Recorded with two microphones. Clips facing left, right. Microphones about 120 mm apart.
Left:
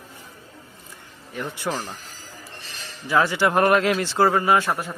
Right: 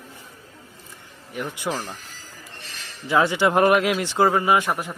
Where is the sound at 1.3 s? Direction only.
15° right (ahead or behind).